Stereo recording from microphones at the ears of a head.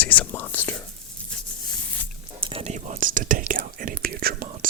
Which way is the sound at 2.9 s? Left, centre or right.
Right.